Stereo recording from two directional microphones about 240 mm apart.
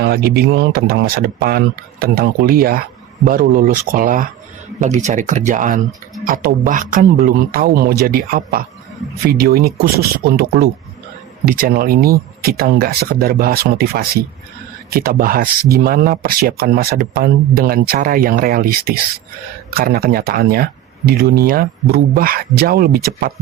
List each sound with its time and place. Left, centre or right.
0.0 s speech: right